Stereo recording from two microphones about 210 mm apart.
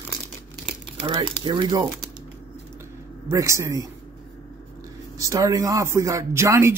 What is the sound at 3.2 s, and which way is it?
Speech, 15° right (ahead or behind).